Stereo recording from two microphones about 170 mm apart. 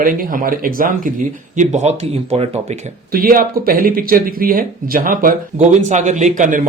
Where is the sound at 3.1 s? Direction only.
55° right (ahead or behind).